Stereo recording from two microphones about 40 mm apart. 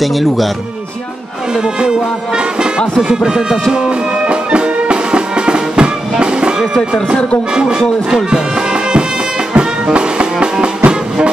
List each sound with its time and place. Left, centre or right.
0.0 s speech: centre
1.8 s music: right
3.0 s speech: centre
3.7 s music: right
6.7 s speech: centre
7.5 s music: centre
9.5 s music: right